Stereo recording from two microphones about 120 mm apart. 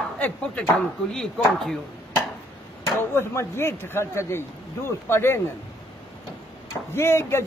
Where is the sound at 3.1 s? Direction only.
20° left (ahead or behind).